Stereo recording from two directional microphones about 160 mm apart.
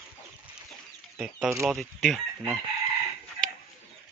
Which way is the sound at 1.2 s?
10° right (ahead or behind).